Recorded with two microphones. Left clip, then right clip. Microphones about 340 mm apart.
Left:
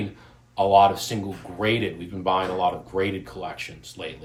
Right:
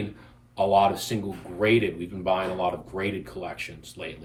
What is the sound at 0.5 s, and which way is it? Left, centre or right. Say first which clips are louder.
Speech: left 4 dB; centre.